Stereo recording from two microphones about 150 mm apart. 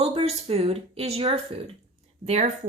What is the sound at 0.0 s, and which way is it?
Speech, 40° right (ahead or behind).